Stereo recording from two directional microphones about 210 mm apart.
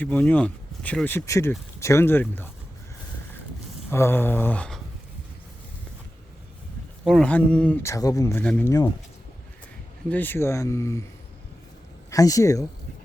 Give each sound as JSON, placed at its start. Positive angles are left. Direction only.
{"t": 0.0, "sound": "speech", "side_deg": 5}
{"t": 3.8, "sound": "speech", "side_deg": 10}
{"t": 7.0, "sound": "speech", "side_deg": 0}
{"t": 10.1, "sound": "speech", "side_deg": 10}
{"t": 12.1, "sound": "speech", "side_deg": 15}